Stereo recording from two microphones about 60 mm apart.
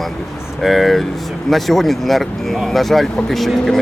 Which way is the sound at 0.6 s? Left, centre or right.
Centre.